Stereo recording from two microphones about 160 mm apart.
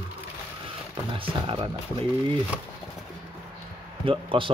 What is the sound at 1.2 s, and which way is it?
Speech, 30° right (ahead or behind).